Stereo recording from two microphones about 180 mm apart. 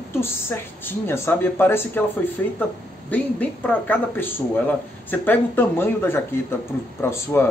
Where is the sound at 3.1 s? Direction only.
10° left (ahead or behind).